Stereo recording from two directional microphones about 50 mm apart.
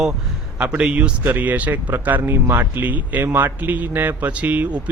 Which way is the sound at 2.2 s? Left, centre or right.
Right.